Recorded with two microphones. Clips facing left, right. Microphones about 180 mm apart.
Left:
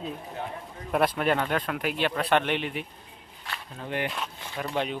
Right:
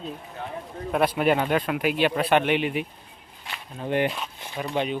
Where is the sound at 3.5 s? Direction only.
25° right (ahead or behind).